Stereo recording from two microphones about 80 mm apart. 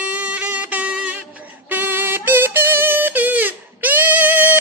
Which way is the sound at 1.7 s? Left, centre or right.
Right.